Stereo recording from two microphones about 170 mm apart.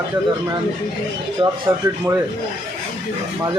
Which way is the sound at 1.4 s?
30° right (ahead or behind).